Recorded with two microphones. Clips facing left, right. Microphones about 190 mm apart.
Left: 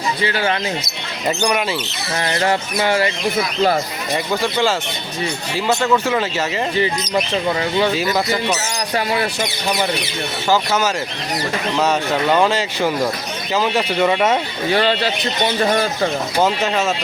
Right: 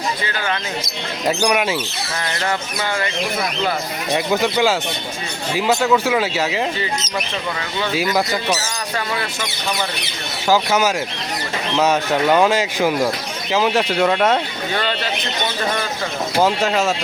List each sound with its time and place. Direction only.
1.3 s speech: 5° right (ahead or behind)
2.2 s a sound: 35° left (ahead or behind)
5.6 s speech: 5° right (ahead or behind)
10.5 s speech: 10° right (ahead or behind)
14.7 s a sound: 35° left (ahead or behind)
16.4 s speech: centre (ahead or behind)